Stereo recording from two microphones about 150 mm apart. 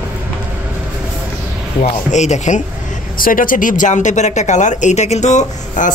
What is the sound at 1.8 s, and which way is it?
Speech, 50° left (ahead or behind).